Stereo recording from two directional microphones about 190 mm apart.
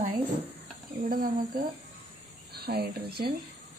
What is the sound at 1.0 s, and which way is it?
Speech, 50° right (ahead or behind).